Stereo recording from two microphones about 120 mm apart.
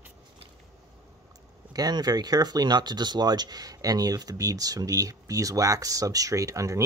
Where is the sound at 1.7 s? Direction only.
35° right (ahead or behind).